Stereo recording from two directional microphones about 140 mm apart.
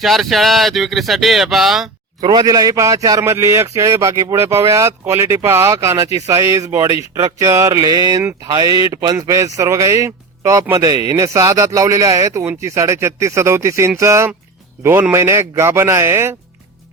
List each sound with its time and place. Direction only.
0.0 s speech: centre (ahead or behind)
2.2 s speech: 30° right (ahead or behind)